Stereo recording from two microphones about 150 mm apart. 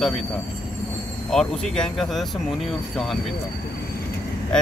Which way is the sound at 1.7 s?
5° left (ahead or behind).